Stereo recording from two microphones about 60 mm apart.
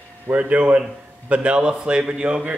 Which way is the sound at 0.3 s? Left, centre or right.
Right.